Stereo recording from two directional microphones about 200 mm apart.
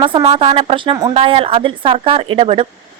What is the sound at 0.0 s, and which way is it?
A woman's voice, 25° right (ahead or behind).